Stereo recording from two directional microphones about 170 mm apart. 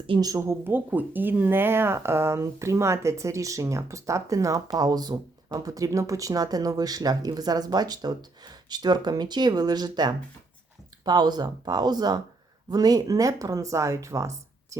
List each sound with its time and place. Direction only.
0.1 s speech: 20° right (ahead or behind)